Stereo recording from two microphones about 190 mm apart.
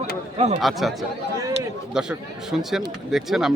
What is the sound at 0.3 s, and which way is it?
Speech, 35° right (ahead or behind).